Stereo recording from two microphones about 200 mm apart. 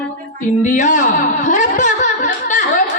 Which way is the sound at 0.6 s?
40° left (ahead or behind).